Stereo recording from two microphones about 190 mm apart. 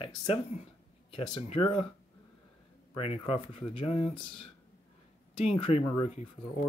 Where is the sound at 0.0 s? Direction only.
25° left (ahead or behind).